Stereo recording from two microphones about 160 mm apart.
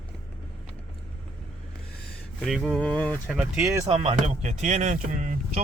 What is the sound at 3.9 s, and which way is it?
Speech, 40° right (ahead or behind).